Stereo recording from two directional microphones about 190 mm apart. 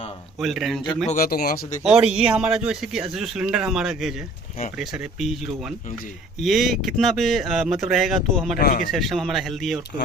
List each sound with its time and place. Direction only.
0.3 s speech: centre (ahead or behind)
1.0 s speech: 45° left (ahead or behind)
1.8 s speech: 5° right (ahead or behind)
8.5 s speech: 50° left (ahead or behind)
8.9 s speech: centre (ahead or behind)